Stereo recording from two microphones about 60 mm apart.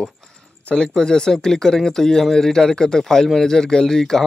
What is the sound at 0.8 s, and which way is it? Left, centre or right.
Speech, centre.